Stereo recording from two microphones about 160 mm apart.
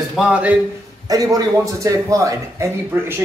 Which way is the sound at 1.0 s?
25° right (ahead or behind).